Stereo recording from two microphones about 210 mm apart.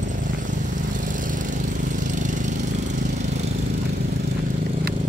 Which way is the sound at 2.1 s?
35° right (ahead or behind).